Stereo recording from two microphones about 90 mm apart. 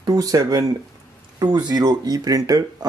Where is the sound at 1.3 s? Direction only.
55° right (ahead or behind).